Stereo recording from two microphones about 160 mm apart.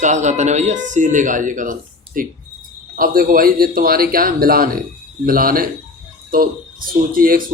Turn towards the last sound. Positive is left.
turn(degrees=-60)  # may be behind; listen again after turning